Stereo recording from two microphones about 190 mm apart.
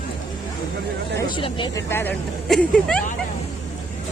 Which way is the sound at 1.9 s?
10° left (ahead or behind).